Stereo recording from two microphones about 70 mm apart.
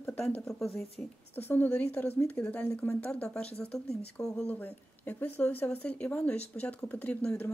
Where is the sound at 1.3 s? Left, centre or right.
Left; by 4.5 s centre.